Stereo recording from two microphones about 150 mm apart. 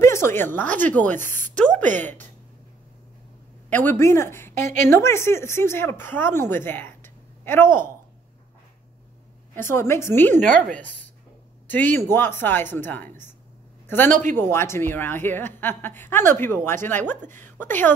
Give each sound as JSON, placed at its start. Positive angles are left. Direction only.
{"t": 0.0, "sound": "a woman's voice", "side_deg": 20}
{"t": 3.7, "sound": "a woman's voice", "side_deg": 15}
{"t": 9.6, "sound": "a woman's voice", "side_deg": 15}